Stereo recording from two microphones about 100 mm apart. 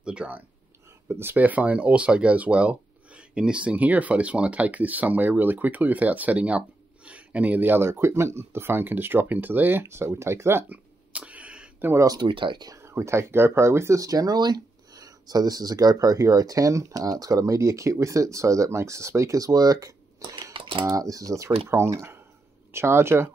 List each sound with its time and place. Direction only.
0.0 s speech: 10° right (ahead or behind)
1.0 s speech: 25° right (ahead or behind)
10.7 s a sound: 15° right (ahead or behind)
11.9 s speech: 35° right (ahead or behind)
12.2 s speech: 55° right (ahead or behind)
12.6 s speech: 30° right (ahead or behind)
20.5 s typing: 55° right (ahead or behind)
20.9 s speech: 35° right (ahead or behind)